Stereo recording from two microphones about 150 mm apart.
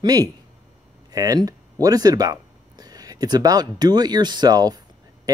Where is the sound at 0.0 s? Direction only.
25° right (ahead or behind).